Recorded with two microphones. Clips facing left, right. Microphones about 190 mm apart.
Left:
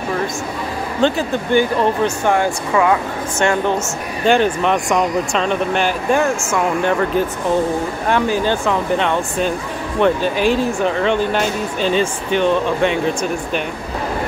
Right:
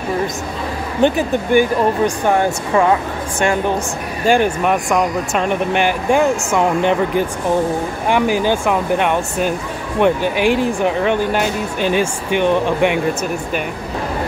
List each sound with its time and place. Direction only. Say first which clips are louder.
1.0 s speech: right 2 dB; 15° right (ahead or behind)
2.7 s speech: right 1 dB; 35° right (ahead or behind)
4.3 s speech: even; 10° right (ahead or behind)
5.4 s speech: right 4 dB; 15° right (ahead or behind)